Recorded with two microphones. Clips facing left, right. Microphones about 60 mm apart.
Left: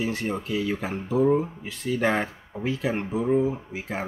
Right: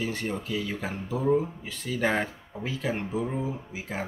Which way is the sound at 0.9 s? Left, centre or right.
Left.